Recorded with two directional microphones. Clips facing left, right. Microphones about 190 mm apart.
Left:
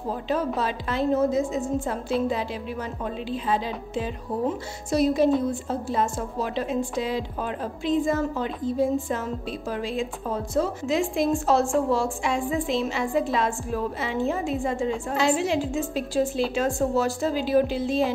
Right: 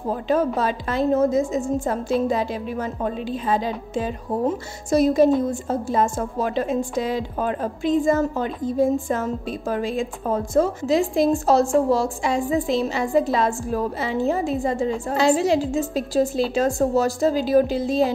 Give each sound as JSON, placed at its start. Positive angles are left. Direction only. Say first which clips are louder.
{"t": 0.6, "sound": "a woman's voice", "louder": "right 4 dB", "side_deg": -45}